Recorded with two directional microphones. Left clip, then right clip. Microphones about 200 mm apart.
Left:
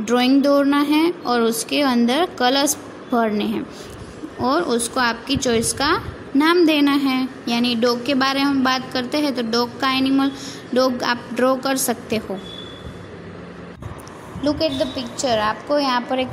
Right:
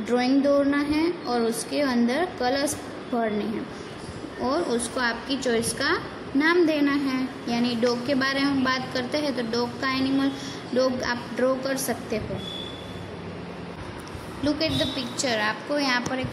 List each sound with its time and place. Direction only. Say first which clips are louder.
0.0 s a sound: left 6 dB; 30° left (ahead or behind)
0.4 s a woman's voice: left 5 dB; 35° left (ahead or behind)
14.4 s a woman's voice: left 5 dB; 15° left (ahead or behind)